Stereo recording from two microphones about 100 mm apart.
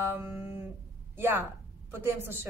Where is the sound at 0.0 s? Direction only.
20° right (ahead or behind).